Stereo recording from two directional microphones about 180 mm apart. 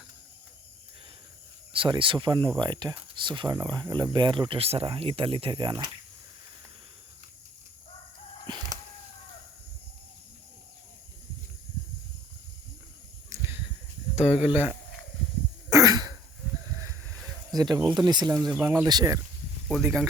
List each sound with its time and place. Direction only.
1.7 s speech: 30° right (ahead or behind)
8.4 s chicken: 25° right (ahead or behind)
13.3 s a sound: 15° right (ahead or behind)
14.2 s speech: 35° left (ahead or behind)
14.5 s speech: 10° right (ahead or behind)
15.7 s throat clearing: 20° right (ahead or behind)
17.5 s speech: 20° right (ahead or behind)
19.8 s speech: 5° right (ahead or behind)